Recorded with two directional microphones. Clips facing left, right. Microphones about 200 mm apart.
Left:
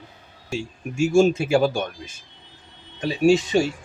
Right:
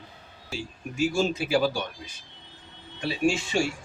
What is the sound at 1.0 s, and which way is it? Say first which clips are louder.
Speech: left 8 dB; 45° left (ahead or behind).